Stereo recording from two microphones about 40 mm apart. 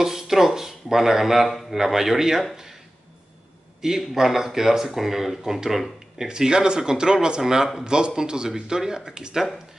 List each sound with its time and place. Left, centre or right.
0.0 s speech: centre
3.8 s speech: centre